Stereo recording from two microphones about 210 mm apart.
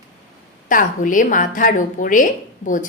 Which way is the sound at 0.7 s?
40° left (ahead or behind).